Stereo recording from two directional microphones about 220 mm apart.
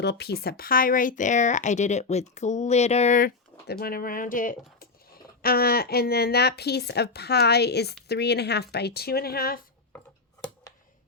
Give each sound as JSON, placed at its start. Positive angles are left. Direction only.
{"t": 0.0, "sound": "speech", "side_deg": 50}